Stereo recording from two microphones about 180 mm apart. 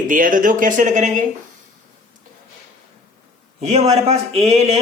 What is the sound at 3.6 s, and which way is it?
Speech, 35° right (ahead or behind).